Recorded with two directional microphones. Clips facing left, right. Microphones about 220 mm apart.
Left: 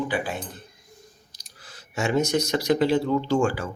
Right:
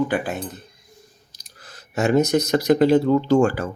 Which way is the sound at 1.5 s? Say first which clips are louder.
Right 5 dB; 45° right (ahead or behind).